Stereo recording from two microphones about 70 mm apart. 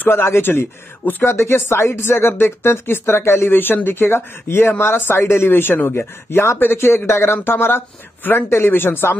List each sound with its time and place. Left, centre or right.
0.0 s speech: left